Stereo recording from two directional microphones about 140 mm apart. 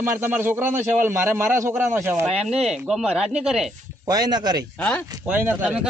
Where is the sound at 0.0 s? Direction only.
15° right (ahead or behind).